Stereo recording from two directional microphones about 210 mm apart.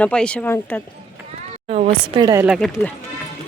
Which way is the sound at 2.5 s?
Centre (ahead or behind).